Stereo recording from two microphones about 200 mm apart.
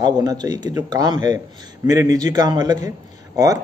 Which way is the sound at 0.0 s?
20° right (ahead or behind).